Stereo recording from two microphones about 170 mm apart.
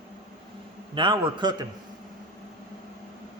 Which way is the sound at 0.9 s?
25° right (ahead or behind).